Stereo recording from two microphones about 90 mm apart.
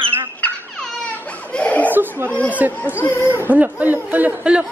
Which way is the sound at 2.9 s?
25° left (ahead or behind).